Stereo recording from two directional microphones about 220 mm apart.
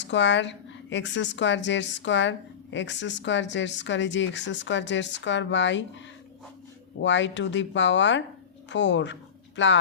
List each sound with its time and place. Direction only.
0.0 s a woman's voice: 55° left (ahead or behind)
7.0 s a woman's voice: 55° left (ahead or behind)